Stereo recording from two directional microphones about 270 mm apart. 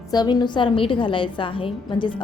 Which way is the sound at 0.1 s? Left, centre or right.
Centre.